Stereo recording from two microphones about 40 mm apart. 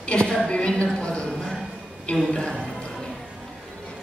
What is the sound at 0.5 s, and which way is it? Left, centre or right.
Speech, left.